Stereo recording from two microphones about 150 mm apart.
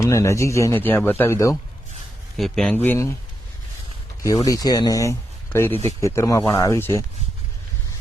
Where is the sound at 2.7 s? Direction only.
15° left (ahead or behind).